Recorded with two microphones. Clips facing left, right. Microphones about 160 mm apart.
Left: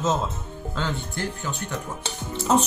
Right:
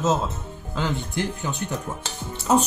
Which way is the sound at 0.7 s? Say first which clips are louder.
Right 3 dB; 15° right (ahead or behind).